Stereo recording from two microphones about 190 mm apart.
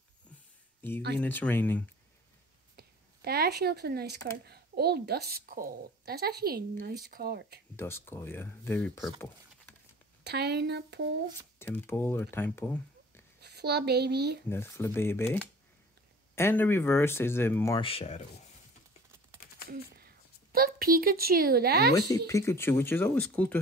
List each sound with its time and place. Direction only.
1.1 s speech: 10° left (ahead or behind)
2.7 s a woman's voice: 55° right (ahead or behind)
7.7 s speech: 10° left (ahead or behind)
10.2 s a woman's voice: 60° right (ahead or behind)
11.6 s speech: 10° left (ahead or behind)
13.4 s a woman's voice: 60° right (ahead or behind)
14.5 s speech: 10° left (ahead or behind)
17.7 s speech: 30° left (ahead or behind)
20.5 s a woman's voice: 50° right (ahead or behind)
22.1 s speech: 15° left (ahead or behind)